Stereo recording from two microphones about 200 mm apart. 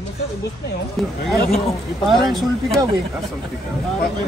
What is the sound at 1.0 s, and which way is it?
Speech, centre (ahead or behind).